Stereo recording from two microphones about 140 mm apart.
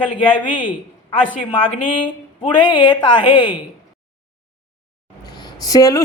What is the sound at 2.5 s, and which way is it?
Speech, 35° left (ahead or behind).